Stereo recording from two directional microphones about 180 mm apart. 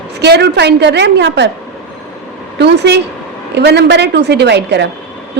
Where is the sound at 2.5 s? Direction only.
70° right (ahead or behind).